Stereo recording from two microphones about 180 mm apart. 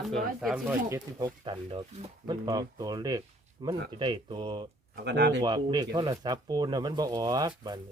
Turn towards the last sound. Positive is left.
turn(degrees=-20)  # may be behind; listen again after turning